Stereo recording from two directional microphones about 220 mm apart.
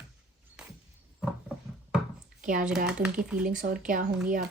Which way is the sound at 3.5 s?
40° right (ahead or behind).